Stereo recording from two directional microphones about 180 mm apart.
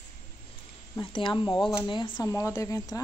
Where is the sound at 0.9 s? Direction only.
25° left (ahead or behind).